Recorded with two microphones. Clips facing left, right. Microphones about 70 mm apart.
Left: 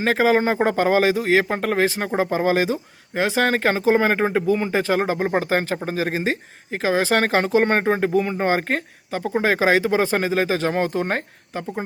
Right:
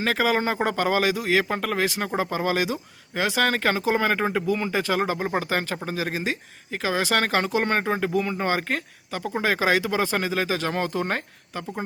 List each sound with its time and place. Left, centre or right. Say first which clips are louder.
0.0 s speech: left 5 dB; left